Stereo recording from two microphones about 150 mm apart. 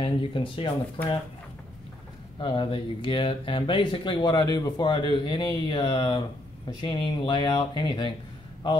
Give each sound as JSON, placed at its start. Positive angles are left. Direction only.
{"t": 0.0, "sound": "speech", "side_deg": 35}
{"t": 2.4, "sound": "speech", "side_deg": 35}